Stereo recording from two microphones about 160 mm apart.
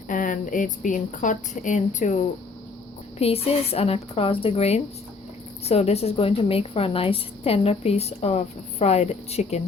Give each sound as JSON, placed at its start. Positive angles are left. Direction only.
{"t": 0.1, "sound": "speech", "side_deg": 55}
{"t": 3.2, "sound": "a woman's voice", "side_deg": 40}